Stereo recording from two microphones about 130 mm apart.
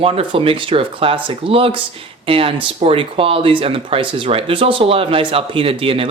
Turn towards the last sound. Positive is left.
turn(degrees=-45)  # may be behind; listen again after turning